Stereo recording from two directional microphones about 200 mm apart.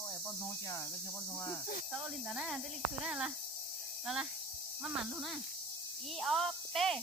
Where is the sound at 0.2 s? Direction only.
15° left (ahead or behind).